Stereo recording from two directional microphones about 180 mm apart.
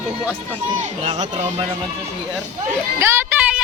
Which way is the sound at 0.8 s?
35° right (ahead or behind).